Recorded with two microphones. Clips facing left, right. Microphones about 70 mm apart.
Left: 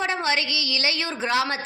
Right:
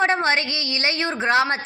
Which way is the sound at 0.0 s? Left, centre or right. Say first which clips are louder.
Right 5 dB; right.